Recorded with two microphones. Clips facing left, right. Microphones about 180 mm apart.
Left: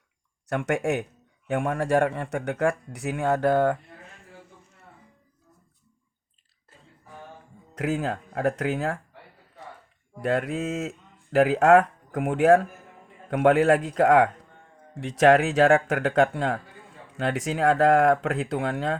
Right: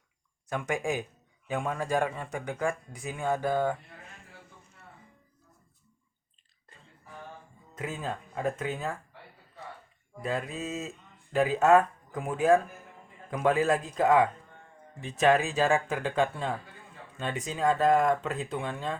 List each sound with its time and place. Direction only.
0.4 s speech: 75° left (ahead or behind)
7.8 s speech: 80° left
10.2 s speech: 75° left (ahead or behind)